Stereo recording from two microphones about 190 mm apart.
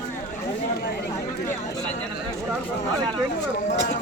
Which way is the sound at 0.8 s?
55° left (ahead or behind).